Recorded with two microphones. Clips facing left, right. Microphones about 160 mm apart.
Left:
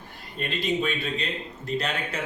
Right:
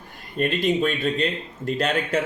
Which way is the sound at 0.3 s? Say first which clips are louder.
Right 6 dB; 50° right (ahead or behind).